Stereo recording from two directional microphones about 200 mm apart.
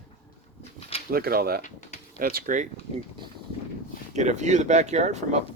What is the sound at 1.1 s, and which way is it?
Speech, 50° right (ahead or behind).